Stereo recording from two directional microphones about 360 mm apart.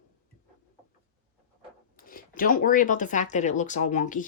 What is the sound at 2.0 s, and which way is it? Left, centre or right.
Speech, left.